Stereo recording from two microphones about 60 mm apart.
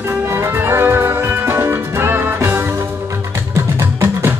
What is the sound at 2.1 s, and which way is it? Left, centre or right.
Music, right.